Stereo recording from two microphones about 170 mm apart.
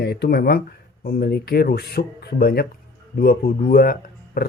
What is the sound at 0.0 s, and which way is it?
A man's voice, 70° left (ahead or behind).